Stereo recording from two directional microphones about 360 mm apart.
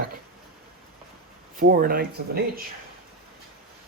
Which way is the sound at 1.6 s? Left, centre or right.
Right.